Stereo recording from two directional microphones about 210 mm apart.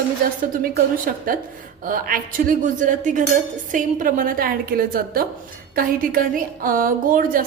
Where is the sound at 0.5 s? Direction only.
40° right (ahead or behind).